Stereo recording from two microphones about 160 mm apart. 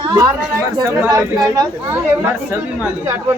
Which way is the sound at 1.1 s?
25° right (ahead or behind).